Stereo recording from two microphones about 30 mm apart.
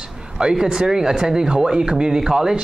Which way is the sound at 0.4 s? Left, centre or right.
Right.